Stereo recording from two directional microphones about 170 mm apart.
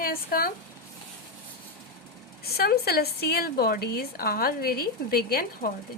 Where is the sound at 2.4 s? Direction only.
65° left (ahead or behind).